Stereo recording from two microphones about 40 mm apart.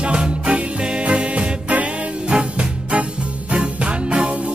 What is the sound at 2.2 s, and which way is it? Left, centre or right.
Music, right.